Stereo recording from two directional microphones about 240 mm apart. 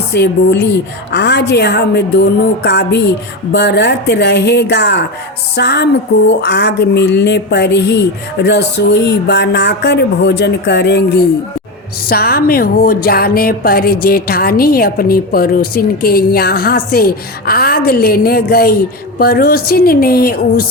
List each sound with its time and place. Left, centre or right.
0.1 s speech: left